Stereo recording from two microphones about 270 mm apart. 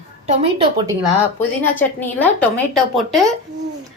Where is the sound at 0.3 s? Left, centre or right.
Right.